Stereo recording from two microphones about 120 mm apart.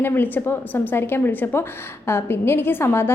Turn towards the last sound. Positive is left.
turn(degrees=20)  # may be behind; listen again after turning